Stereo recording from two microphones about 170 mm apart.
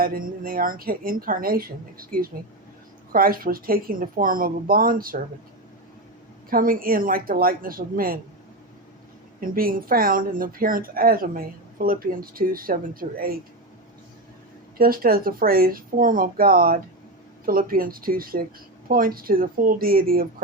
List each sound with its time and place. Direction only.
0.0 s speech: 55° right (ahead or behind)
6.5 s speech: 55° right (ahead or behind)
9.4 s speech: 55° right (ahead or behind)
14.8 s speech: 60° right (ahead or behind)